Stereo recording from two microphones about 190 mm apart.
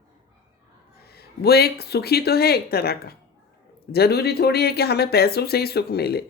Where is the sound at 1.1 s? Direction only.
55° left (ahead or behind).